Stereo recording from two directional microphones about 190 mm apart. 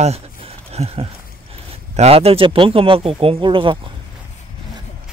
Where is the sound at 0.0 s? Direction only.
30° right (ahead or behind).